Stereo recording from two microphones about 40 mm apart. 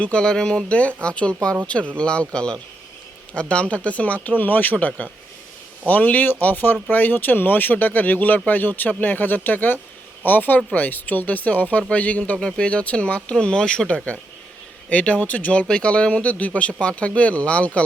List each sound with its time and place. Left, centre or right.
0.0 s speech: left
0.7 s speech: left
12.4 s speech: left
12.6 s speech: left
13.9 s speech: left
16.2 s speech: left